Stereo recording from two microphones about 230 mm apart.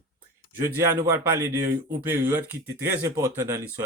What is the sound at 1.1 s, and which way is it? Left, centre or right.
Speech, centre.